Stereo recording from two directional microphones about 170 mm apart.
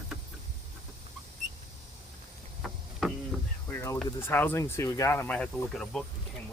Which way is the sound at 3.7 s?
15° left (ahead or behind).